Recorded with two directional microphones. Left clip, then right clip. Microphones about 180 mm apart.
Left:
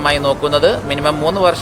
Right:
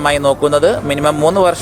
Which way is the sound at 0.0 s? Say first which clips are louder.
Right 2 dB; 35° right (ahead or behind).